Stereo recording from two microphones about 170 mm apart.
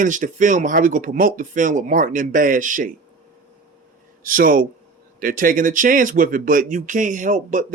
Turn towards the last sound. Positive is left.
turn(degrees=-50)  # may be behind; listen again after turning